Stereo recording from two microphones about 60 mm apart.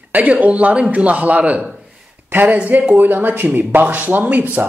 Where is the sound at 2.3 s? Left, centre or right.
Right.